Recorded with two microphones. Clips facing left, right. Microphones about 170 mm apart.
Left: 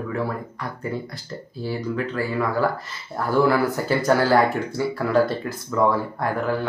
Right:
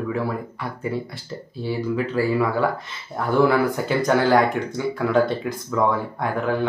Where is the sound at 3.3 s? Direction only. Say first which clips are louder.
Right 1 dB; centre (ahead or behind).